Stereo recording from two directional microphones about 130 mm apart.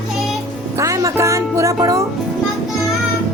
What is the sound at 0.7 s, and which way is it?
Music, 25° right (ahead or behind).